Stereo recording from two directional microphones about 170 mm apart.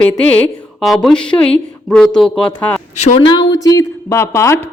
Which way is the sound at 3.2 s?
30° left (ahead or behind).